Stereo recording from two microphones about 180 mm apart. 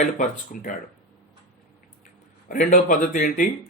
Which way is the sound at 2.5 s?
50° left (ahead or behind).